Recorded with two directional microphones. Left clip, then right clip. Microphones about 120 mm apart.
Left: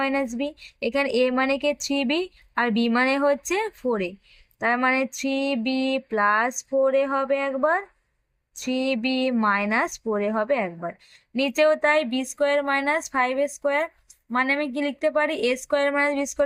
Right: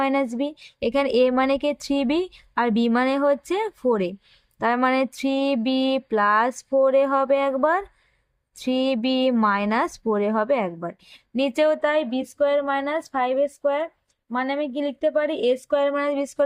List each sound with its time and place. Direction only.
0.0 s speech: 35° right (ahead or behind)